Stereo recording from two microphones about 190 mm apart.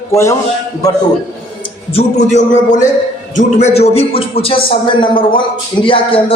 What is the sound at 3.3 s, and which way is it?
A man's voice, 35° left (ahead or behind).